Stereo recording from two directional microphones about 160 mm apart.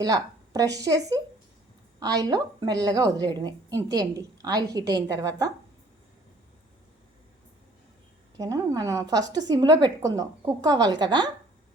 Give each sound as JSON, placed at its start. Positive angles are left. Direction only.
{"t": 0.0, "sound": "a woman's voice", "side_deg": -25}
{"t": 8.4, "sound": "a woman's voice", "side_deg": -20}